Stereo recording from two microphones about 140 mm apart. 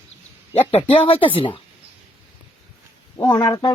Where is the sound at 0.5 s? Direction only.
45° left (ahead or behind).